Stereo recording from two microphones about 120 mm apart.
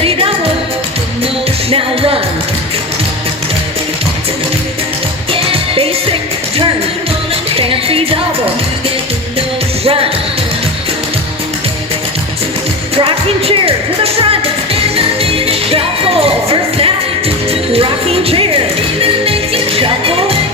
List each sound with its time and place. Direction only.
1.7 s music: 50° right (ahead or behind)
5.3 s music: 50° right (ahead or behind)
7.5 s music: 50° right (ahead or behind)
13.0 s music: 50° right (ahead or behind)